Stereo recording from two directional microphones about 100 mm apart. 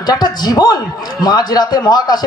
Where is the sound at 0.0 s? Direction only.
45° left (ahead or behind).